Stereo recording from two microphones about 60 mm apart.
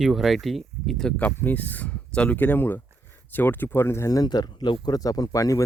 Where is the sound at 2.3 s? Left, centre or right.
Left.